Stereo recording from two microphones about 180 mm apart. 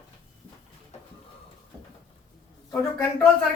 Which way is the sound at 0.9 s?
40° left (ahead or behind).